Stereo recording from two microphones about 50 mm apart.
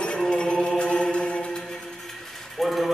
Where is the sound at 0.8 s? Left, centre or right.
Left.